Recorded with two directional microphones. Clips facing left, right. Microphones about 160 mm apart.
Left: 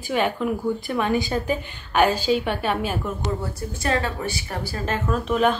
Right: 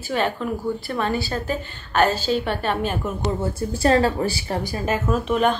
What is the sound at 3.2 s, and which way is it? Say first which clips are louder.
A woman's voice: right 4 dB; 30° right (ahead or behind).